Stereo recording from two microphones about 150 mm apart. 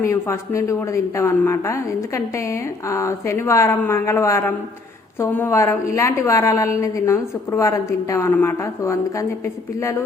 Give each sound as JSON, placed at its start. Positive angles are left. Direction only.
{"t": 0.0, "sound": "a woman's voice", "side_deg": 20}